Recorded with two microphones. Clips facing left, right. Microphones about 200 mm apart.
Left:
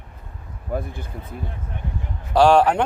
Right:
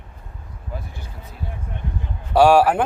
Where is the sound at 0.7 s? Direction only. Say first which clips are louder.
Left 8 dB; 55° left (ahead or behind).